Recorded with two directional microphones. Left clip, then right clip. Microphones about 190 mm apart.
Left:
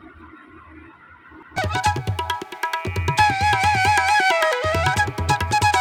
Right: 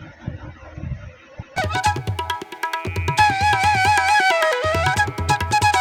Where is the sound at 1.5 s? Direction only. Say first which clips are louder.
Right 1 dB; centre (ahead or behind).